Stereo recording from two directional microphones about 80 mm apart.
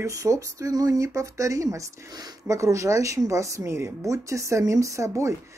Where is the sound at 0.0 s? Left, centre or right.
Right.